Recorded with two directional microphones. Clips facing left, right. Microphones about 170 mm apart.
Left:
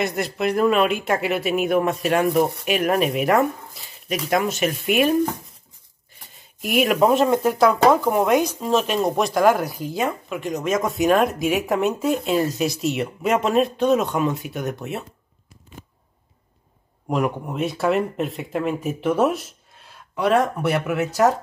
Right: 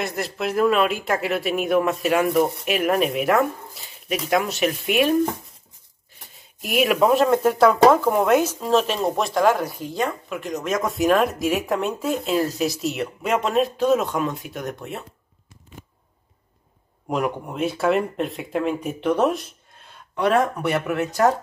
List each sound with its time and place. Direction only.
0.0 s speech: centre (ahead or behind)
17.1 s speech: centre (ahead or behind)